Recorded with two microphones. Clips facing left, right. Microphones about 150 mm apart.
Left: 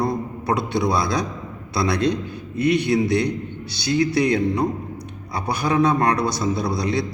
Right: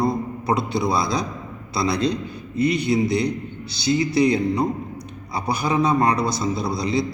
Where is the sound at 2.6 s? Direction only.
60° left (ahead or behind).